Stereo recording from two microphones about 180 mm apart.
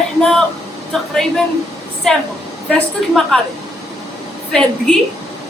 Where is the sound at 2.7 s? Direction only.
5° left (ahead or behind).